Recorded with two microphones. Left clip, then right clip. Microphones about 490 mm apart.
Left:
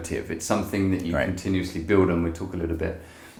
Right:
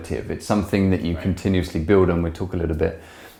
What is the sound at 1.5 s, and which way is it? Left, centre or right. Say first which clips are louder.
Speech: right 4 dB; right.